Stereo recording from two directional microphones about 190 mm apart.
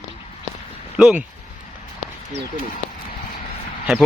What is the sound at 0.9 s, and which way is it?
Speech, 5° right (ahead or behind).